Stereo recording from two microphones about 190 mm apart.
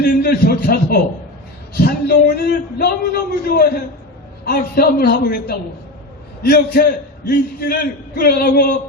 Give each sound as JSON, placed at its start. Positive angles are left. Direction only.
{"t": 0.0, "sound": "a man's voice", "side_deg": 55}